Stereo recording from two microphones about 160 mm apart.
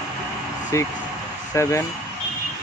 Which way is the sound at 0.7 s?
20° left (ahead or behind).